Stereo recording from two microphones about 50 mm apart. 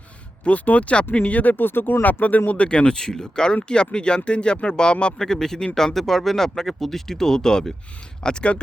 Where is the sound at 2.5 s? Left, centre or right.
Left.